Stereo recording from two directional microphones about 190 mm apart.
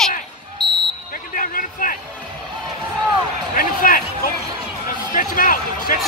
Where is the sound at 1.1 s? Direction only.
45° left (ahead or behind).